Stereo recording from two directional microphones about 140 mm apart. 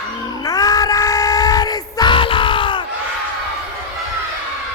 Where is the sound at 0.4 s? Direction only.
25° left (ahead or behind).